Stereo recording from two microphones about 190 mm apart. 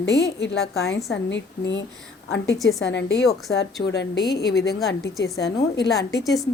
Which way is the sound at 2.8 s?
65° left (ahead or behind).